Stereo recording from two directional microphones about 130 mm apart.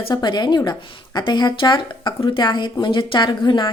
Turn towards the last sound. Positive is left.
turn(degrees=40)  # may be behind; listen again after turning